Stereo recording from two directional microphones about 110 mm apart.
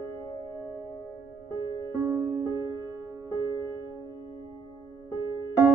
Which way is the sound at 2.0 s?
20° right (ahead or behind).